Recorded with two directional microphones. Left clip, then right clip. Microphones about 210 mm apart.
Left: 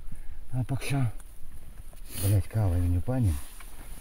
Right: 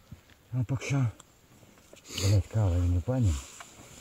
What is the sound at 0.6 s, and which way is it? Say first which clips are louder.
Speech: even; 20° left (ahead or behind).